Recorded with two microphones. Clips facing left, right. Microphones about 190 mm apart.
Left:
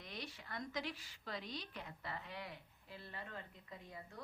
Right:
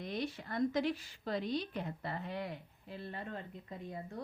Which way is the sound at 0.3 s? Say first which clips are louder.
Right 12 dB; 50° right (ahead or behind).